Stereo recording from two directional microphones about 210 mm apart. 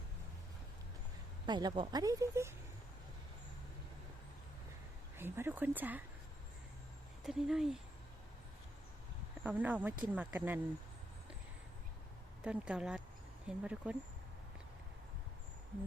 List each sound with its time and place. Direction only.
1.5 s speech: 20° right (ahead or behind)
5.1 s speech: 10° right (ahead or behind)
7.3 s speech: centre (ahead or behind)
9.4 s speech: 5° right (ahead or behind)
12.5 s speech: 5° right (ahead or behind)